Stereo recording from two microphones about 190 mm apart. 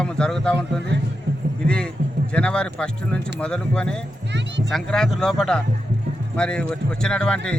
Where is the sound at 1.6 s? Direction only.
5° left (ahead or behind).